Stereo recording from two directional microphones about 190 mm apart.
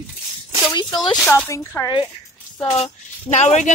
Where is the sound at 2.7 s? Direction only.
35° left (ahead or behind).